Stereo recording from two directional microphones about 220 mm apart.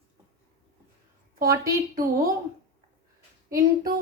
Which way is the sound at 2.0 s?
40° right (ahead or behind).